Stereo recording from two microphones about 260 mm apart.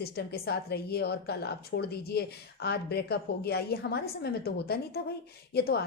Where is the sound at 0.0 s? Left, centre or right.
Left.